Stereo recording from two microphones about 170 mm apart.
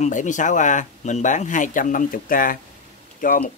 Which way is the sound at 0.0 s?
45° left (ahead or behind).